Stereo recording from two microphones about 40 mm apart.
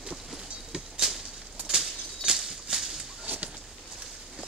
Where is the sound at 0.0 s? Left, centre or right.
Centre.